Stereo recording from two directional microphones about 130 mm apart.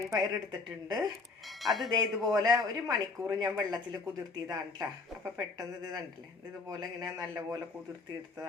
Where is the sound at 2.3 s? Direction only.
30° right (ahead or behind).